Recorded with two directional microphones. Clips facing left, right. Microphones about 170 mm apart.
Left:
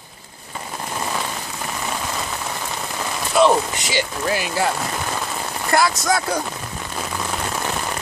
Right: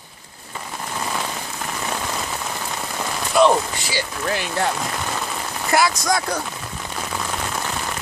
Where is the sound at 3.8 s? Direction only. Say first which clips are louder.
Left 3 dB; 20° left (ahead or behind).